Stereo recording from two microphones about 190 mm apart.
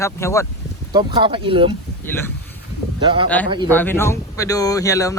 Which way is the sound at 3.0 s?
25° right (ahead or behind).